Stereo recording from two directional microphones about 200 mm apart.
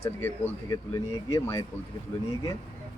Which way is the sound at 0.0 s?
10° left (ahead or behind).